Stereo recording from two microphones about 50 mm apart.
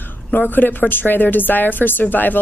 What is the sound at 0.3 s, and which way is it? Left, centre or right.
A woman's voice, left.